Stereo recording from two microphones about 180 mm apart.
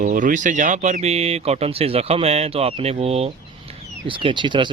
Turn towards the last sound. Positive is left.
turn(degrees=-25)  # may be behind; listen again after turning